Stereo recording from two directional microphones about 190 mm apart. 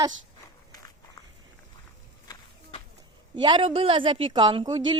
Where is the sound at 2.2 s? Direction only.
20° left (ahead or behind).